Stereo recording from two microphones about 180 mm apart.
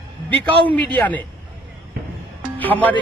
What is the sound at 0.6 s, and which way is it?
Speech, 10° left (ahead or behind).